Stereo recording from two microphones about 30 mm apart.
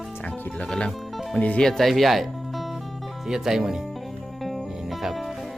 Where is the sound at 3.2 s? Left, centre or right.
Centre.